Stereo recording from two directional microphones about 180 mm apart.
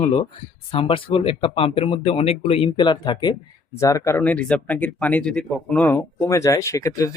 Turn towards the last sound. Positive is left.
turn(degrees=20)  # may be behind; listen again after turning